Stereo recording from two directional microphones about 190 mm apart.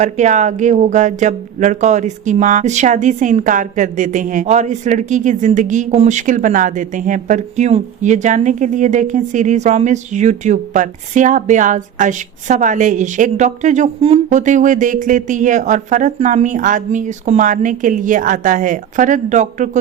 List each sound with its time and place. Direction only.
0.0 s speech: 40° right (ahead or behind)